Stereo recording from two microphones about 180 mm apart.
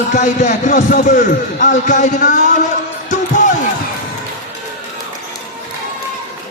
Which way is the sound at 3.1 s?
45° left (ahead or behind).